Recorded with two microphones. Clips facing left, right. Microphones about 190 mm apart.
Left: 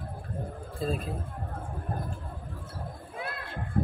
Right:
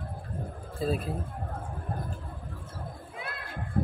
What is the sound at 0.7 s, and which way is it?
Speech, 5° right (ahead or behind).